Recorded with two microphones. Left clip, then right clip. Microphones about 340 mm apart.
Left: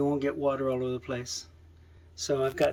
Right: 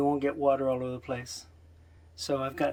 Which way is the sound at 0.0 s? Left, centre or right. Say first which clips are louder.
Right 1 dB; centre.